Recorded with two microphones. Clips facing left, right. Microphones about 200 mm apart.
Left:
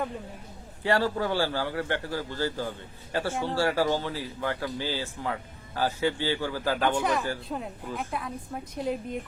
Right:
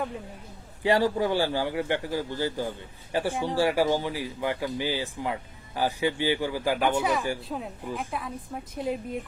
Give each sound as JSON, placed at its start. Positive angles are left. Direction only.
{"t": 0.8, "sound": "a woman's voice", "side_deg": -15}